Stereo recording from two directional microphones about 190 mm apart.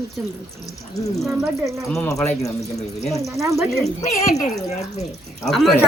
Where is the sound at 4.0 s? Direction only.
40° left (ahead or behind).